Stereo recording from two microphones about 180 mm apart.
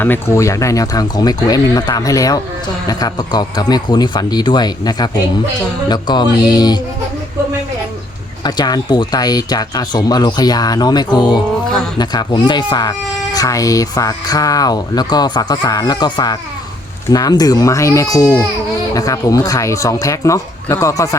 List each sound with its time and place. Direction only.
0.0 s speech: 15° left (ahead or behind)
8.4 s speech: 20° left (ahead or behind)